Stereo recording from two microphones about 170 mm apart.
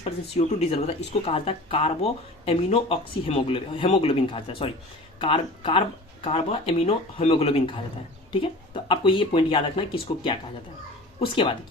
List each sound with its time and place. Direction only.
0.0 s speech: 40° left (ahead or behind)